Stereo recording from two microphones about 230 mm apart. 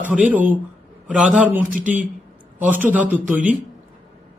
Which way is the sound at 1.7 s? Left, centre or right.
Right.